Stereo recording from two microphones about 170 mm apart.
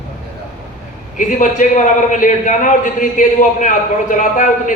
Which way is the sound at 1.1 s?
50° left (ahead or behind).